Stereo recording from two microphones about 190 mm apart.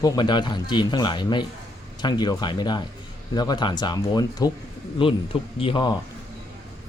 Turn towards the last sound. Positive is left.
turn(degrees=25)  # may be behind; listen again after turning